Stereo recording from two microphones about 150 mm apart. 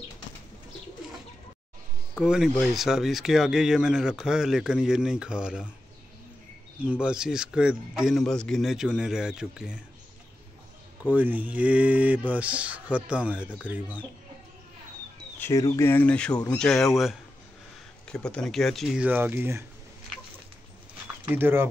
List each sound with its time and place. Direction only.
2.1 s a man's voice: 5° right (ahead or behind)
6.8 s a man's voice: 10° right (ahead or behind)
11.1 s speech: 10° right (ahead or behind)
15.3 s bird: 15° left (ahead or behind)
15.6 s speech: 25° left (ahead or behind)
15.9 s a man's voice: 10° left (ahead or behind)
19.0 s speech: 10° right (ahead or behind)
21.3 s speech: 15° right (ahead or behind)